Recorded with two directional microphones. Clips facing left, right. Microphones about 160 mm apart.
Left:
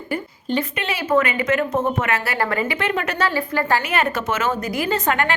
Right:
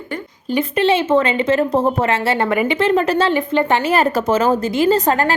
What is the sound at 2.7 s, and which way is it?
Speech, 30° right (ahead or behind).